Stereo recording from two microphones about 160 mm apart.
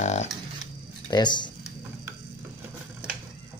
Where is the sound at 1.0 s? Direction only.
25° left (ahead or behind).